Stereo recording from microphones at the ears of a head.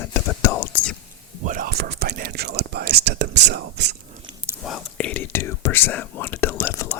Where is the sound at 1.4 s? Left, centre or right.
Right.